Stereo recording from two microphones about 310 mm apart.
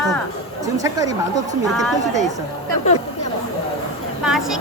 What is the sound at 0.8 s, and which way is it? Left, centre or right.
Speech, centre.